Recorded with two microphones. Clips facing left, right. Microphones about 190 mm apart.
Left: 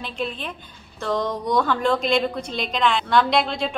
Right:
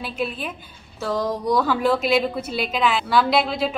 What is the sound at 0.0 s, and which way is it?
A woman's voice, 5° right (ahead or behind).